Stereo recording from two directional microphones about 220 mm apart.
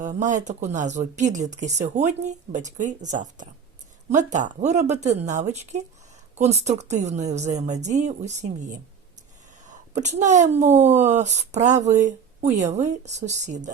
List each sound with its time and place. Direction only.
0.0 s speech: 35° right (ahead or behind)